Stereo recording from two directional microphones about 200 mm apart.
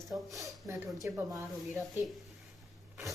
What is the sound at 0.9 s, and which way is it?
Speech, 15° right (ahead or behind).